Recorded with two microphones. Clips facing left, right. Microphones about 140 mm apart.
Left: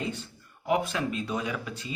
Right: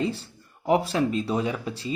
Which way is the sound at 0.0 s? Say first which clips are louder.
Right 6 dB; 30° right (ahead or behind).